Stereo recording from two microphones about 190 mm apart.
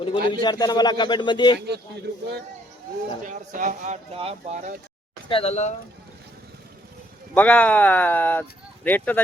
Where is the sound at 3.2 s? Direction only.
45° right (ahead or behind).